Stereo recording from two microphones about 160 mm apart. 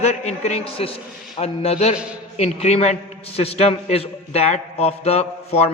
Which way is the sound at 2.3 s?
40° left (ahead or behind).